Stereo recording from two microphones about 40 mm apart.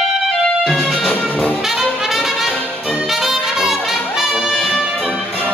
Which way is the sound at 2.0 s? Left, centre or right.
Centre.